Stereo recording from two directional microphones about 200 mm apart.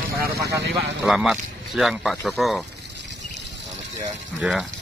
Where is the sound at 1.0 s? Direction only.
5° right (ahead or behind).